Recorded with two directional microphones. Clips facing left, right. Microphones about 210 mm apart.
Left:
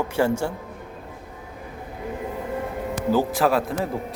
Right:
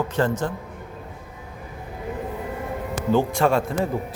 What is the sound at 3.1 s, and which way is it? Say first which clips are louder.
Speech: right 1 dB; 5° left (ahead or behind).